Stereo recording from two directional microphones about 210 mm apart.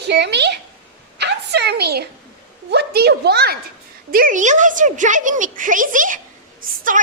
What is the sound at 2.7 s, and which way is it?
A child's voice, 50° right (ahead or behind).